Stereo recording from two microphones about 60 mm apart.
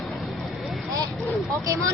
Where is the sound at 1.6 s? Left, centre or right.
Right.